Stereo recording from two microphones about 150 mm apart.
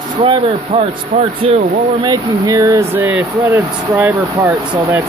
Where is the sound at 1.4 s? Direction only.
40° right (ahead or behind).